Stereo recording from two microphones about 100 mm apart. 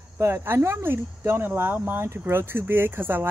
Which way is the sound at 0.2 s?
25° right (ahead or behind).